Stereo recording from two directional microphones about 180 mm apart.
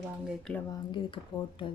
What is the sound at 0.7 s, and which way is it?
Speech, 25° left (ahead or behind).